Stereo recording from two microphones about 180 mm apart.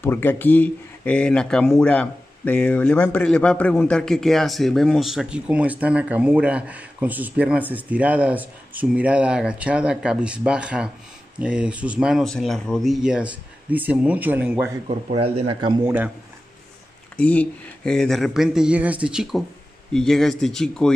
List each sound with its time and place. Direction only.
0.0 s speech: 10° left (ahead or behind); by 14.7 s 10° right (ahead or behind)
14.9 s speech: 35° right (ahead or behind)
15.8 s speech: 10° right (ahead or behind)
17.2 s speech: 10° left (ahead or behind)